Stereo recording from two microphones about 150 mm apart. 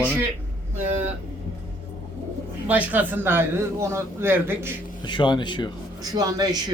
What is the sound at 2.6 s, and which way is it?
A man's voice, 10° right (ahead or behind).